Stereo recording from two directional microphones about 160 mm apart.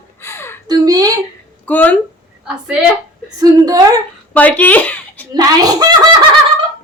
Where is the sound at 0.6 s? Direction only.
25° right (ahead or behind).